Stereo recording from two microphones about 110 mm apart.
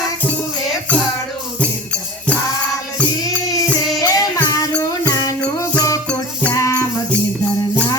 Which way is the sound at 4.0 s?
35° left (ahead or behind).